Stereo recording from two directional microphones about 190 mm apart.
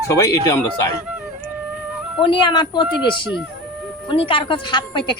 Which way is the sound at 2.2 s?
25° left (ahead or behind).